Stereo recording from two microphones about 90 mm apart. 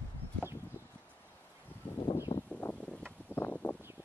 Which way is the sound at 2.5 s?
20° left (ahead or behind).